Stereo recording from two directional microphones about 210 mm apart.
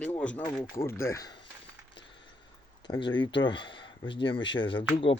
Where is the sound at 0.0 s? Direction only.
5° left (ahead or behind).